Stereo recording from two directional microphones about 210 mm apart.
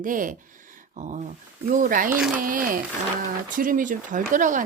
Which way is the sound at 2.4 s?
40° right (ahead or behind).